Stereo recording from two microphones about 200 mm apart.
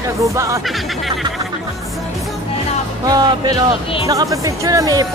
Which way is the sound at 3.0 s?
20° right (ahead or behind).